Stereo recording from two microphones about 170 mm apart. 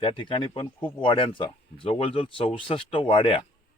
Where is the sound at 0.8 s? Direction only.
10° left (ahead or behind).